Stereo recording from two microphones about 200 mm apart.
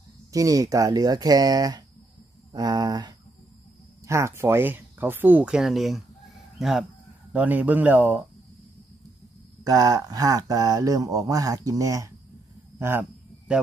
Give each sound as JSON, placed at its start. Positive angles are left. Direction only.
{"t": 0.3, "sound": "speech", "side_deg": -15}
{"t": 9.7, "sound": "speech", "side_deg": -20}